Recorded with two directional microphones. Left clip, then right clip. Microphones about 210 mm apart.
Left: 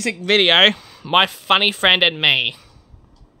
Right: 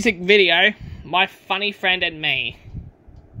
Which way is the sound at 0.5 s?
30° left (ahead or behind).